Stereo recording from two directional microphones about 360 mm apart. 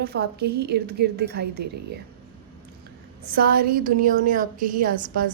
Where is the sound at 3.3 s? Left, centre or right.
Right.